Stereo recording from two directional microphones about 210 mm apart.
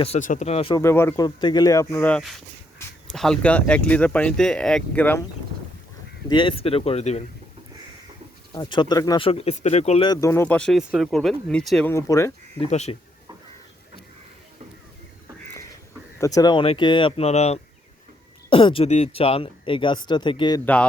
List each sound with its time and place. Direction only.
0.0 s speech: 35° left (ahead or behind)
0.8 s speech: 10° left (ahead or behind)
6.2 s speech: 25° left (ahead or behind)
8.5 s speech: 20° left (ahead or behind)
12.7 s speech: 30° left (ahead or behind)
16.2 s speech: 15° left (ahead or behind)